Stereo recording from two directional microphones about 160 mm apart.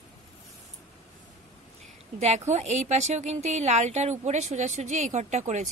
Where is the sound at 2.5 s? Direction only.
45° right (ahead or behind).